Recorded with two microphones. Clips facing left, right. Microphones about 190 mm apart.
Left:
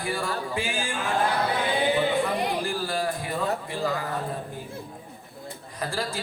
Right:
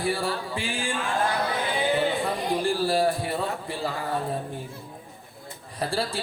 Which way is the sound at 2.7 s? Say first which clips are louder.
Right 5 dB; 30° right (ahead or behind).